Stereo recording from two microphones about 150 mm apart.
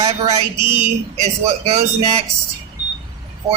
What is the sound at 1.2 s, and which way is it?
Speech, 45° right (ahead or behind).